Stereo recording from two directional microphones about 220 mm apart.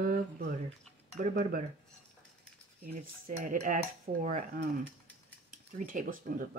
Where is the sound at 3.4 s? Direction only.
35° right (ahead or behind).